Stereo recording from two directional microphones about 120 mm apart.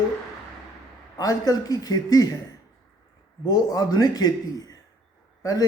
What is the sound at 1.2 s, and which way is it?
Speech, 30° left (ahead or behind).